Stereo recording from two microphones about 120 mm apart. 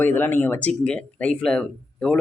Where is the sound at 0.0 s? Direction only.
15° left (ahead or behind).